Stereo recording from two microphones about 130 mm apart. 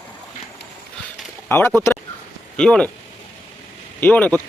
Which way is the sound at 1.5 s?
15° left (ahead or behind).